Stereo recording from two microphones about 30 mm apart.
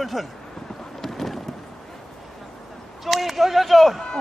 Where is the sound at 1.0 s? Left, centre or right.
Centre.